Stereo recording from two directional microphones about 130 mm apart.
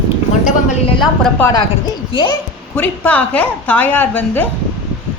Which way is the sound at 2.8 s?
10° left (ahead or behind).